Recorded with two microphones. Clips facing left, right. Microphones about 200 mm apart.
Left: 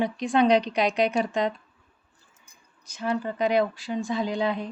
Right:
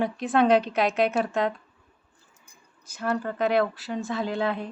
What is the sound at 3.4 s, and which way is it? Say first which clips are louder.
Speech: even; 15° left (ahead or behind).